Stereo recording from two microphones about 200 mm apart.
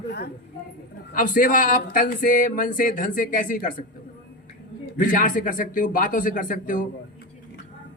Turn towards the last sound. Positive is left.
turn(degrees=40)  # may be behind; listen again after turning